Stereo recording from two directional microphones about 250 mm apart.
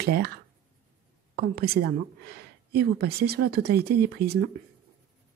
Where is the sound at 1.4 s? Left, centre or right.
Right.